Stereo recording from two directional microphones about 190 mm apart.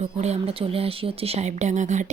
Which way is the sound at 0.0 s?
35° right (ahead or behind).